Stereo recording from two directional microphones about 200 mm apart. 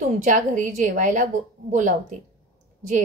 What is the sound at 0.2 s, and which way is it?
A woman's voice, 40° right (ahead or behind).